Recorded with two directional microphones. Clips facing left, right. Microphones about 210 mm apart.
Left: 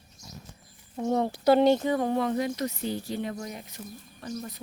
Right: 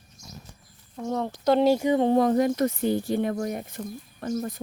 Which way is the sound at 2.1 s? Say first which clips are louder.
Right 6 dB; 45° right (ahead or behind).